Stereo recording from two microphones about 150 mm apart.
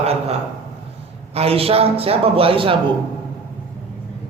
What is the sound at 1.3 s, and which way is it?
Speech, 40° right (ahead or behind).